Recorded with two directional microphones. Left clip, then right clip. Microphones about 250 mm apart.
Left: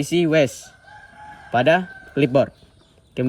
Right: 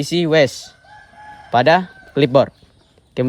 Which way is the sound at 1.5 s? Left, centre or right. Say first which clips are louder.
Right 4 dB; right.